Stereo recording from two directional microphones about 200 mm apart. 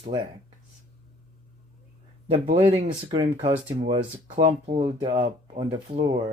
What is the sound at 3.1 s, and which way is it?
Speech, 25° right (ahead or behind).